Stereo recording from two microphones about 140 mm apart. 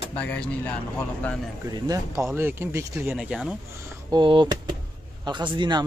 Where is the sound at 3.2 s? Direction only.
5° right (ahead or behind).